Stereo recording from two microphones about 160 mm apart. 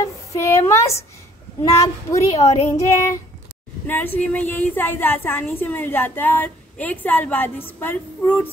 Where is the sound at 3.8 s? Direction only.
10° left (ahead or behind).